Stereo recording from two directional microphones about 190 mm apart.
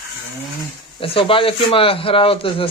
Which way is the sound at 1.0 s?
30° left (ahead or behind).